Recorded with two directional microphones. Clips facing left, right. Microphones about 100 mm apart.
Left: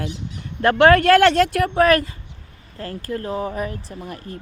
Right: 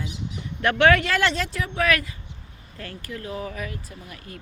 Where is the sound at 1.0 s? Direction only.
55° left (ahead or behind).